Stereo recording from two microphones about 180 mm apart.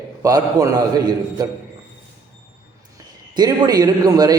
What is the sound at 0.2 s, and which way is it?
A man's voice, 20° right (ahead or behind).